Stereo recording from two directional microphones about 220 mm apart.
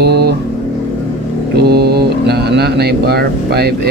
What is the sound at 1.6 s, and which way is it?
Speech, 45° right (ahead or behind).